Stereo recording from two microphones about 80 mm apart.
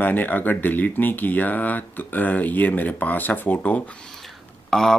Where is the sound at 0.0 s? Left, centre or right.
Left.